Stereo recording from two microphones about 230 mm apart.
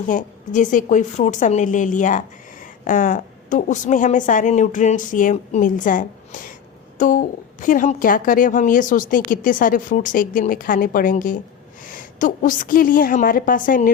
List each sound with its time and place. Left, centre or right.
0.1 s a woman's voice: left